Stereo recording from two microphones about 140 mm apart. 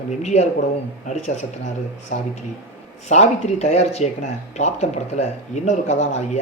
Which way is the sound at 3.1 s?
55° left (ahead or behind).